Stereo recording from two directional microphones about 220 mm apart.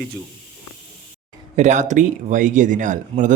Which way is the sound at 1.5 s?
30° right (ahead or behind).